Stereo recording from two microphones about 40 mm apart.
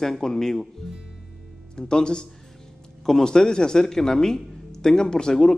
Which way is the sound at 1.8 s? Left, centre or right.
Left.